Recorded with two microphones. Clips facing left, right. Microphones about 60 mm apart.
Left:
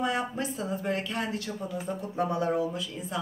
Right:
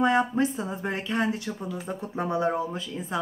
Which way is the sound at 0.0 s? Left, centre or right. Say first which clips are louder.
Right 7 dB; right.